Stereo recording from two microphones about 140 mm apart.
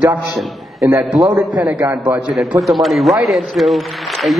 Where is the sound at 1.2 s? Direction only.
25° right (ahead or behind).